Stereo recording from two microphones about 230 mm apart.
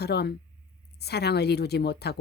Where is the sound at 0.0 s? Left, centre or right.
Left.